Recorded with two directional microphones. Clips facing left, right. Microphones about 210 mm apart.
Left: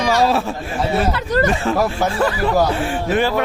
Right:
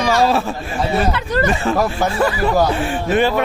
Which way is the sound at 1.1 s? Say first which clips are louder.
Left 1 dB; 40° left (ahead or behind).